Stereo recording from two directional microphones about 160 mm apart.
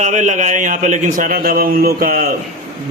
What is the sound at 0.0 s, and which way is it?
A man's voice, 50° right (ahead or behind).